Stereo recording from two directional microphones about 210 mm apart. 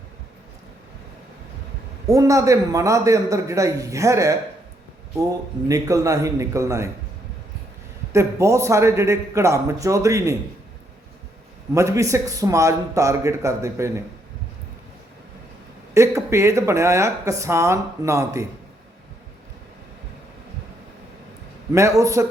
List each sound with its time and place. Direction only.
2.0 s speech: 15° right (ahead or behind)
8.1 s speech: 15° right (ahead or behind)
11.7 s speech: 15° right (ahead or behind)
16.0 s speech: 15° right (ahead or behind)
21.7 s speech: 15° right (ahead or behind)